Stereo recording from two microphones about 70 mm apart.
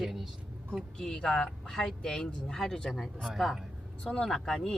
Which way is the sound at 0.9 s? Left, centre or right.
Centre.